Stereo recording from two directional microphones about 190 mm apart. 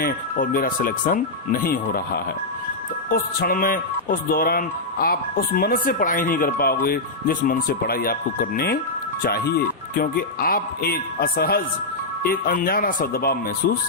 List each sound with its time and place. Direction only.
0.0 s speech: 50° left (ahead or behind)